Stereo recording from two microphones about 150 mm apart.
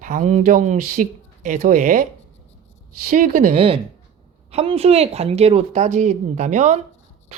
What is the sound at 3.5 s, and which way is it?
Speech, 35° right (ahead or behind).